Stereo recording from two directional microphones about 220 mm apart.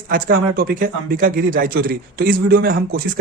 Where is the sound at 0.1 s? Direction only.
45° right (ahead or behind).